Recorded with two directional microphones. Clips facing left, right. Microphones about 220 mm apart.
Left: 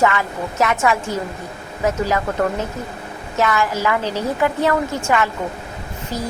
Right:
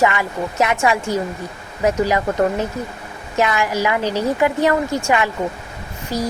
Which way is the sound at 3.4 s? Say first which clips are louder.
Right 1 dB; 15° right (ahead or behind).